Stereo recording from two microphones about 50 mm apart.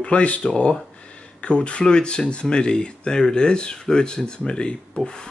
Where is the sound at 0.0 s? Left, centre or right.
Left.